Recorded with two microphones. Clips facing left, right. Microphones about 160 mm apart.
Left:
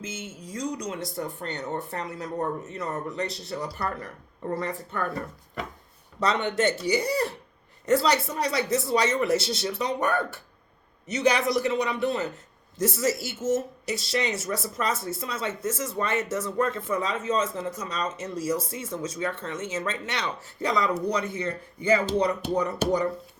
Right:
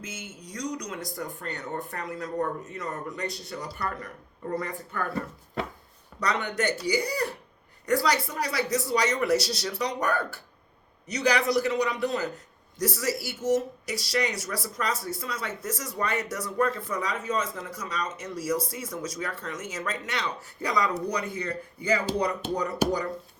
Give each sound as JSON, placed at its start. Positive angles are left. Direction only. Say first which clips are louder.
{"t": 0.0, "sound": "speech", "louder": "left 3 dB", "side_deg": 25}
{"t": 6.1, "sound": "speech", "louder": "left 3 dB", "side_deg": 25}